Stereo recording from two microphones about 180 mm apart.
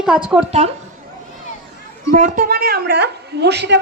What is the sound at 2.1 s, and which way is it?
A woman's voice, 50° right (ahead or behind).